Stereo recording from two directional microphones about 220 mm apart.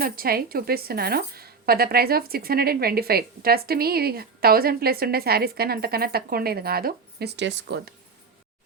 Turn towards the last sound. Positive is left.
turn(degrees=-50)  # may be behind; listen again after turning